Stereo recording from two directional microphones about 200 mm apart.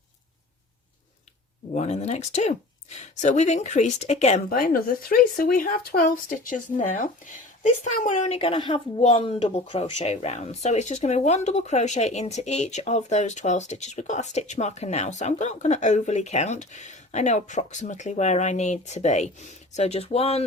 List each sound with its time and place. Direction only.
1.7 s speech: 35° left (ahead or behind)